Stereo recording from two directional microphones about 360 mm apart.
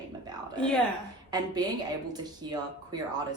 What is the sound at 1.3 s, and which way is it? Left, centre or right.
A woman's voice, centre.